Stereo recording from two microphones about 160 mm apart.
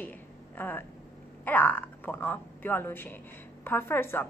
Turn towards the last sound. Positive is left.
turn(degrees=15)  # may be behind; listen again after turning